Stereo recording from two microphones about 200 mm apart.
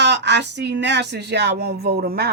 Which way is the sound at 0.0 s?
60° right (ahead or behind).